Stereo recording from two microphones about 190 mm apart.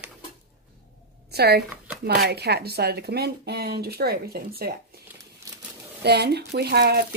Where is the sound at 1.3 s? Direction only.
60° right (ahead or behind).